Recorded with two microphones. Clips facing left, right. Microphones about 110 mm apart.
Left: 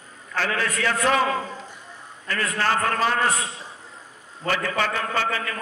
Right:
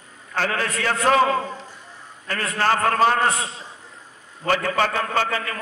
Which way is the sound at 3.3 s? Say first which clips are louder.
Even; 30° right (ahead or behind).